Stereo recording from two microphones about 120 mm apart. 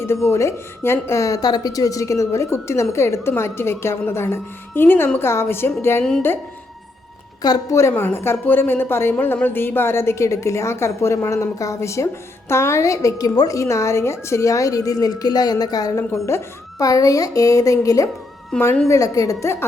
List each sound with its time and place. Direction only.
0.0 s a woman's voice: 20° left (ahead or behind)
6.0 s speech: 5° left (ahead or behind)
7.4 s a woman's voice: 30° left (ahead or behind)
18.6 s speech: 15° left (ahead or behind)
18.9 s a woman's voice: 30° left (ahead or behind)